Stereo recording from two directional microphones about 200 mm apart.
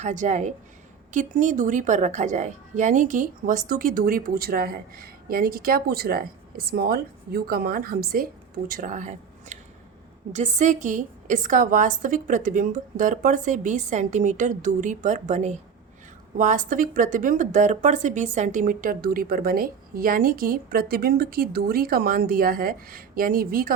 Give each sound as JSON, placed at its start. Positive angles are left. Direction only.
{"t": 0.0, "sound": "a woman's voice", "side_deg": -35}